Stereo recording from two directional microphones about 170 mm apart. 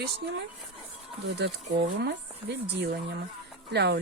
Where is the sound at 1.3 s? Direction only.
90° right.